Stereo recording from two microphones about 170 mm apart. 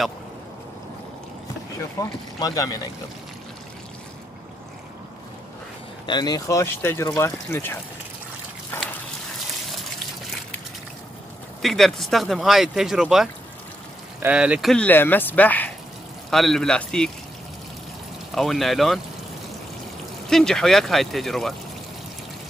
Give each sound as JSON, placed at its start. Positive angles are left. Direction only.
{"t": 2.0, "sound": "speech", "side_deg": 20}
{"t": 6.0, "sound": "speech", "side_deg": 25}
{"t": 11.6, "sound": "speech", "side_deg": 0}
{"t": 18.3, "sound": "speech", "side_deg": 0}
{"t": 20.2, "sound": "speech", "side_deg": 0}